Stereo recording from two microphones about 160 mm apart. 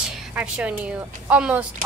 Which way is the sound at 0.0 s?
5° right (ahead or behind).